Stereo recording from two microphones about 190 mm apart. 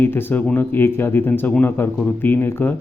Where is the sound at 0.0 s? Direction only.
10° left (ahead or behind).